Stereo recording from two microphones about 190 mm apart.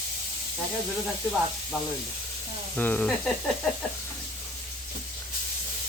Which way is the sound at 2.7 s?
10° left (ahead or behind).